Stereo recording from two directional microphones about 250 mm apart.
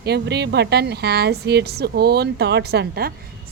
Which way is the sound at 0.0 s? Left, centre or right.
Right.